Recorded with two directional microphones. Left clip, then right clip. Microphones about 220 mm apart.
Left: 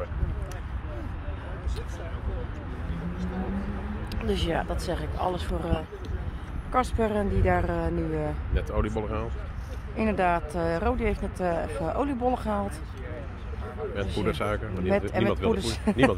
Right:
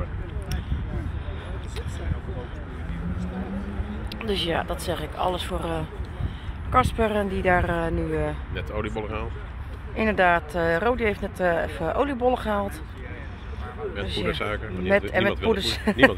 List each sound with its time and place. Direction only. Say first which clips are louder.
4.1 s speech: right 3 dB; 15° left (ahead or behind)
8.5 s speech: left 3 dB; 55° left (ahead or behind)
9.9 s speech: right 5 dB; centre (ahead or behind)
14.2 s speech: right 1 dB; 50° left (ahead or behind)
14.9 s speech: right 4 dB; centre (ahead or behind)